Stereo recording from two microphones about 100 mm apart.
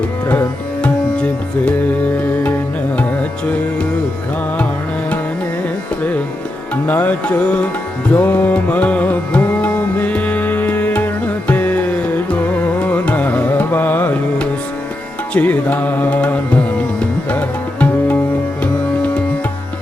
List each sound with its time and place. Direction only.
0.3 s music: 15° left (ahead or behind)
6.8 s music: 15° left (ahead or behind)